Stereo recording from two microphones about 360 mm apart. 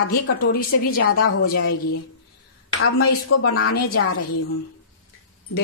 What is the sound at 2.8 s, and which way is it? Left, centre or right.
A woman's voice, left.